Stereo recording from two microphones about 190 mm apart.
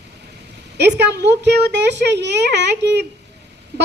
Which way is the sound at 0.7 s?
65° right (ahead or behind).